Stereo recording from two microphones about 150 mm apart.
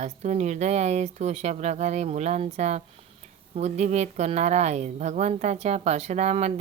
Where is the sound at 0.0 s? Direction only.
50° right (ahead or behind).